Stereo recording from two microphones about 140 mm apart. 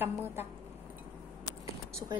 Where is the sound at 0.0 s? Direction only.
15° right (ahead or behind).